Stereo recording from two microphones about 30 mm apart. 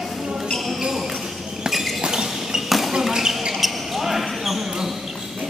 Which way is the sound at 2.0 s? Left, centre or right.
Right.